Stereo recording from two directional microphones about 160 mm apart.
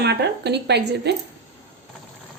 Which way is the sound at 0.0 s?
90° right.